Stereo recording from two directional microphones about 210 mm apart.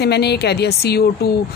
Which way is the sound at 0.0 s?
50° left (ahead or behind).